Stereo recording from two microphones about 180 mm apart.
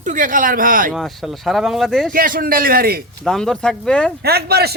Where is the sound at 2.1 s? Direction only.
50° right (ahead or behind).